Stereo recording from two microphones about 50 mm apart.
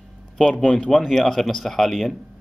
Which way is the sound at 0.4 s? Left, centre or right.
Centre.